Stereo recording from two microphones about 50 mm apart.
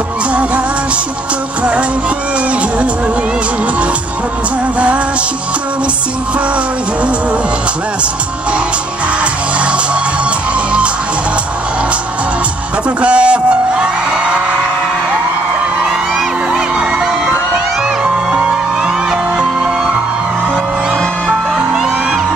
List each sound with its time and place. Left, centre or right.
1.6 s music: right
4.7 s music: right
6.3 s music: right
12.8 s music: right
16.5 s music: centre
21.5 s music: centre